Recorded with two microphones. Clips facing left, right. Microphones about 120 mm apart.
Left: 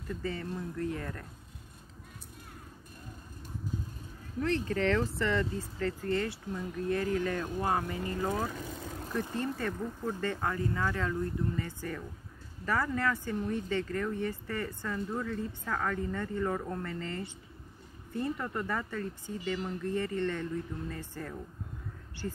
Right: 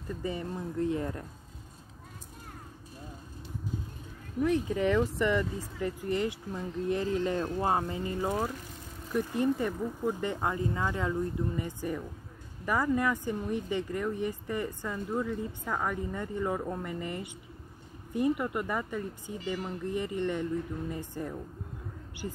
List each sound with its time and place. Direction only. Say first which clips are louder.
0.2 s speech: right 3 dB; 20° right (ahead or behind)
4.4 s speech: right 3 dB; 10° right (ahead or behind)